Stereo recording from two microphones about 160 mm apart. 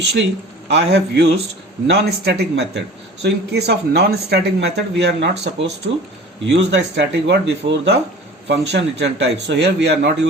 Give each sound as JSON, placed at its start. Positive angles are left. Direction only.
{"t": 0.0, "sound": "speech", "side_deg": -90}